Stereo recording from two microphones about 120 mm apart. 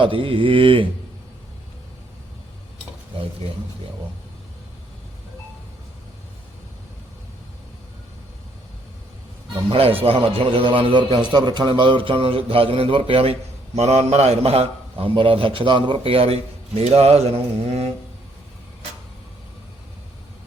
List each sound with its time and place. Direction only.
0.0 s a man's voice: 45° right (ahead or behind)
9.6 s a man's voice: 50° right (ahead or behind)
13.7 s a man's voice: 65° right (ahead or behind)